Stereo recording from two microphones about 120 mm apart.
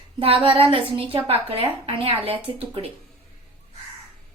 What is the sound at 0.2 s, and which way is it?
A woman's voice, 50° right (ahead or behind).